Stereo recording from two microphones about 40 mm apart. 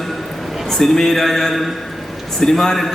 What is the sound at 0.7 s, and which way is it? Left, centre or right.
A man's voice, centre.